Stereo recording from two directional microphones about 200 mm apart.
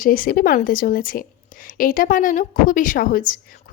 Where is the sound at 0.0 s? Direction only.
45° left (ahead or behind).